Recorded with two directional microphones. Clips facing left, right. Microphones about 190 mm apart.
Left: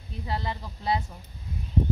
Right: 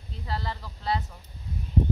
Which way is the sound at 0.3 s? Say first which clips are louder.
Left 2 dB; 20° left (ahead or behind).